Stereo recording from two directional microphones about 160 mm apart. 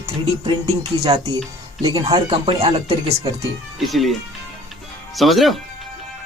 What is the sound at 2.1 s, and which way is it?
Speech, 30° right (ahead or behind).